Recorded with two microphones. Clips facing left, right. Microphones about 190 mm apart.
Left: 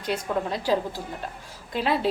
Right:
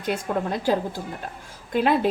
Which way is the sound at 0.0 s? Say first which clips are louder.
Right 1 dB; 50° right (ahead or behind).